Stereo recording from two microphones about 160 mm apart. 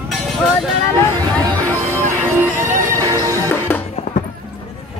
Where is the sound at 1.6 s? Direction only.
20° right (ahead or behind).